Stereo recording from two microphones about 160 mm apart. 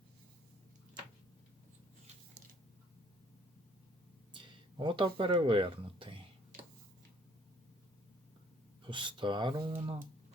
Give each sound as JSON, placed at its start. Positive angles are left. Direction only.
{"t": 4.3, "sound": "speech", "side_deg": -30}
{"t": 8.9, "sound": "speech", "side_deg": -30}